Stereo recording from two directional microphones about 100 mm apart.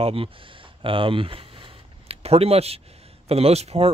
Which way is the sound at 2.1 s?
90° right.